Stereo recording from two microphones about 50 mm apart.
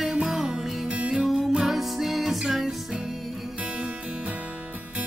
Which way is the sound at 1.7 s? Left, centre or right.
Centre.